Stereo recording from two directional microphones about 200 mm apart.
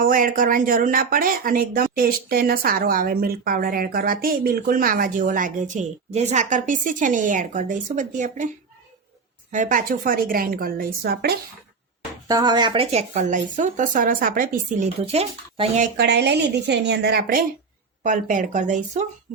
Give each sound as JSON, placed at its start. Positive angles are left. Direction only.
{"t": 0.0, "sound": "a woman's voice", "side_deg": -45}
{"t": 9.5, "sound": "a woman's voice", "side_deg": -40}
{"t": 12.3, "sound": "speech", "side_deg": -20}
{"t": 15.0, "sound": "speech", "side_deg": -30}
{"t": 16.0, "sound": "a woman's voice", "side_deg": -55}